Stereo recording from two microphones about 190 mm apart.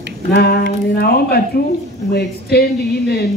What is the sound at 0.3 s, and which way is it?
A woman's voice, 55° left (ahead or behind).